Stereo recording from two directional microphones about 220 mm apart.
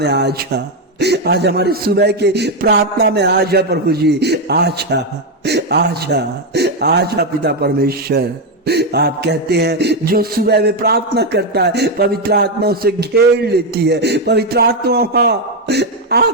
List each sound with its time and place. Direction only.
0.0 s speech: 50° right (ahead or behind)